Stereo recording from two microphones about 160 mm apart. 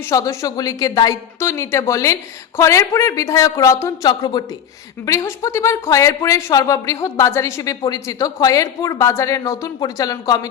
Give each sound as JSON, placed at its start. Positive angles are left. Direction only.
{"t": 0.1, "sound": "speech", "side_deg": 20}